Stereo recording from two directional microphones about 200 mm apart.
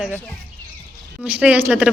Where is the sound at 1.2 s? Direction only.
5° right (ahead or behind).